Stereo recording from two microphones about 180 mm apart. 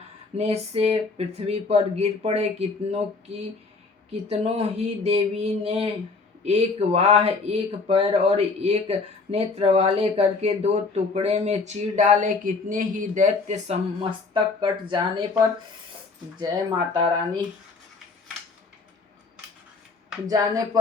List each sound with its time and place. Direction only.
0.3 s speech: 35° right (ahead or behind)
4.3 s speech: 35° right (ahead or behind)
16.4 s speech: 25° right (ahead or behind)
20.2 s speech: 20° right (ahead or behind)